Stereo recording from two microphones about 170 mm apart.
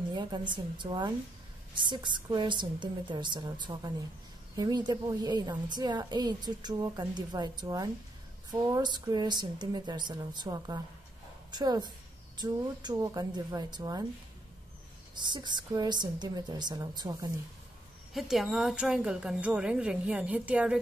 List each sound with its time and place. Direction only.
0.1 s a woman's voice: 25° right (ahead or behind)
15.1 s a woman's voice: 25° right (ahead or behind)
18.1 s a woman's voice: centre (ahead or behind)